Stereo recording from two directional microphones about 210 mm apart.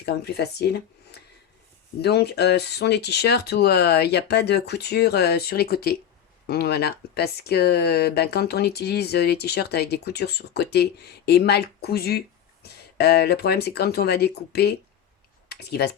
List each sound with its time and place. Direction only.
0.0 s speech: 50° left (ahead or behind)